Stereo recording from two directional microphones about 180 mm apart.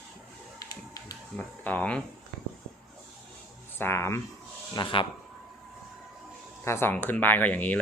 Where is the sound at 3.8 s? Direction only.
15° left (ahead or behind).